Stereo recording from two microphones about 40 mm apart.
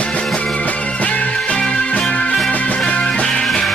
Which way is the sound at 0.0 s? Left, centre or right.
Left.